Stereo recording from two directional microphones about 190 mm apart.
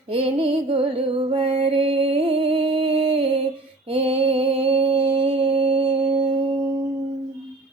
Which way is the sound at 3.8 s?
30° right (ahead or behind).